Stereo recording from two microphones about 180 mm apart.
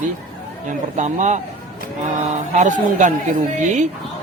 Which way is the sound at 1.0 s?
40° right (ahead or behind).